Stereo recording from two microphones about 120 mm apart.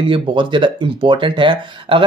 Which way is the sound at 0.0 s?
45° right (ahead or behind).